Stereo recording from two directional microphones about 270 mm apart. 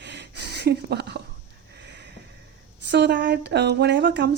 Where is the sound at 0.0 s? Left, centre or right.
Right.